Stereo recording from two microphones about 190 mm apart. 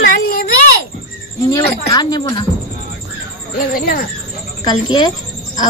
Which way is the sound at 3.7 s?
50° left (ahead or behind).